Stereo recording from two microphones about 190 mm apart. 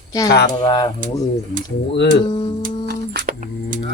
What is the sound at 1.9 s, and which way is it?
Speech, 60° left (ahead or behind).